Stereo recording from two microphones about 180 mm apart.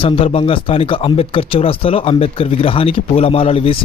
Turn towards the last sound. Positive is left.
turn(degrees=30)  # may be behind; listen again after turning